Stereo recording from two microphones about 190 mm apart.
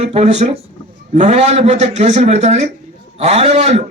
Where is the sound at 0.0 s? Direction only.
35° right (ahead or behind).